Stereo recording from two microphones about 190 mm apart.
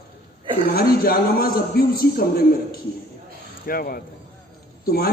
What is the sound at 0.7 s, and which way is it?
A man's voice, 55° left (ahead or behind).